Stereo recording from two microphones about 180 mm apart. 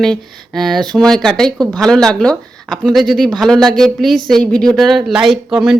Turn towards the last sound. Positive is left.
turn(degrees=0)  # may be behind; listen again after turning